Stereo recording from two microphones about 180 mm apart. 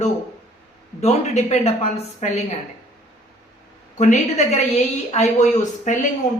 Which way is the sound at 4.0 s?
40° left (ahead or behind).